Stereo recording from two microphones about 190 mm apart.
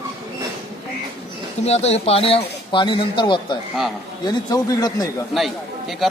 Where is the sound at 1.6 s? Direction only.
35° left (ahead or behind).